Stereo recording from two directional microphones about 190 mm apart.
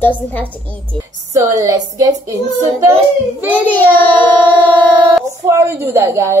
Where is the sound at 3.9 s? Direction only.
10° left (ahead or behind).